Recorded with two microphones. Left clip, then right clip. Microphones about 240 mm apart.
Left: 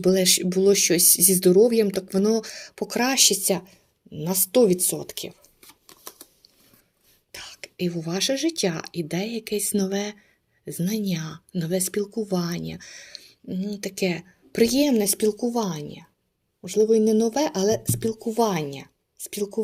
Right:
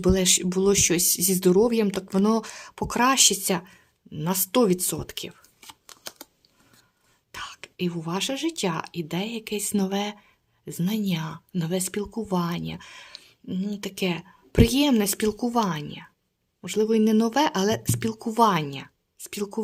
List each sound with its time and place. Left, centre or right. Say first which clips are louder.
0.0 s speech: left 2 dB; centre
7.3 s whispering: even; centre
8.1 s speech: left 4 dB; centre
13.1 s a sound: left 2 dB; centre
13.8 s speech: left 3 dB; centre